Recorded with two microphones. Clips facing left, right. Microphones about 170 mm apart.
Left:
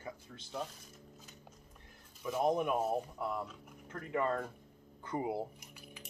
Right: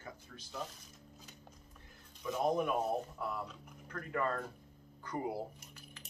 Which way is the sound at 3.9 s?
20° left (ahead or behind).